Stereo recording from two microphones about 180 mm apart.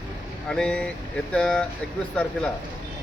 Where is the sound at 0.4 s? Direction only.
5° left (ahead or behind).